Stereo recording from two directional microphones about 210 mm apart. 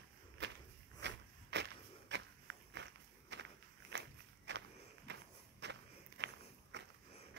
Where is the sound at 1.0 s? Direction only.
55° right (ahead or behind).